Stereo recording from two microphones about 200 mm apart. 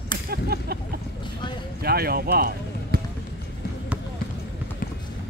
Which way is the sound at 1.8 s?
50° right (ahead or behind).